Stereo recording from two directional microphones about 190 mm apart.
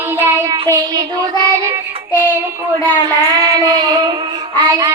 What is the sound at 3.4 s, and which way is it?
Child singing, 20° right (ahead or behind).